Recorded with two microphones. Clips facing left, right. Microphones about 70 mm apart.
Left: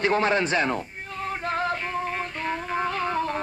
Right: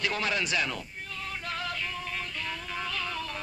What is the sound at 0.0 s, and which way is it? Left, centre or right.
Speech, left.